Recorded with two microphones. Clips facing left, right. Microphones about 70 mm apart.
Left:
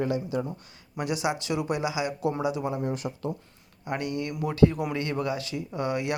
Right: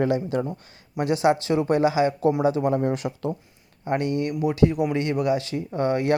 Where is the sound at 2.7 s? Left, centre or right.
Right.